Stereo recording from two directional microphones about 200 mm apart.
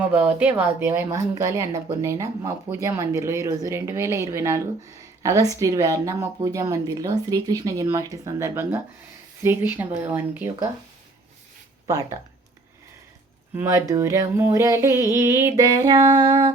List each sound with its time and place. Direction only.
0.0 s speech: 10° right (ahead or behind)
13.6 s speech: 15° right (ahead or behind)